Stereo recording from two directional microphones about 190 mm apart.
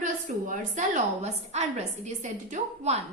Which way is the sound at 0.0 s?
45° right (ahead or behind).